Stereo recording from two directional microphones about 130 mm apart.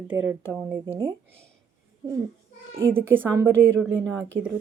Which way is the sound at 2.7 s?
20° right (ahead or behind).